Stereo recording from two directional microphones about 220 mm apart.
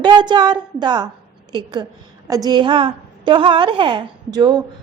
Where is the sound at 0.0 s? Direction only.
20° right (ahead or behind).